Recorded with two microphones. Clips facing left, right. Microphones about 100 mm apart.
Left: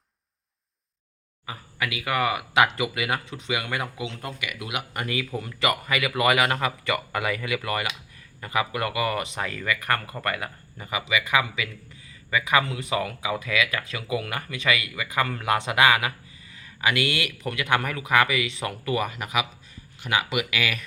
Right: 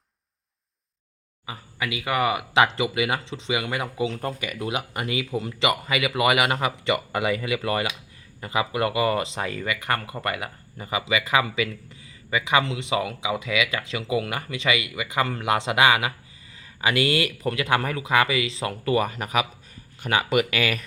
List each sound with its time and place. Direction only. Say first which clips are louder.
1.5 s speech: even; 25° right (ahead or behind)
4.0 s speech: right 6 dB; 40° right (ahead or behind)